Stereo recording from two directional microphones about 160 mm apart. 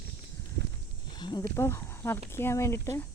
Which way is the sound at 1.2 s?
30° left (ahead or behind).